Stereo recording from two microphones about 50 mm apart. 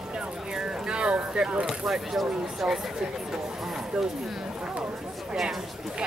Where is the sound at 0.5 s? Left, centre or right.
Centre.